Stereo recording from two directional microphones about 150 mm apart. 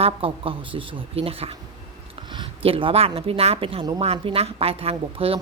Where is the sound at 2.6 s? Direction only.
40° right (ahead or behind).